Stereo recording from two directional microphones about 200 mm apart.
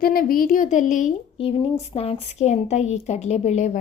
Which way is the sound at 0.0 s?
45° left (ahead or behind).